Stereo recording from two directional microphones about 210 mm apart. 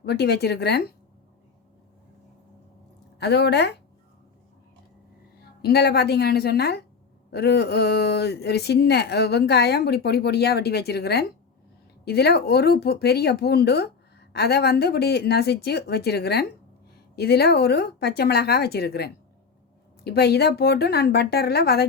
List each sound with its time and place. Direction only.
0.0 s speech: 50° left (ahead or behind)
3.2 s speech: 50° left (ahead or behind)
5.6 s speech: 50° left (ahead or behind)